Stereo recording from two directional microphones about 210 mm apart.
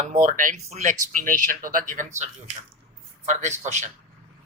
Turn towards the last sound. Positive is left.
turn(degrees=-35)  # may be behind; listen again after turning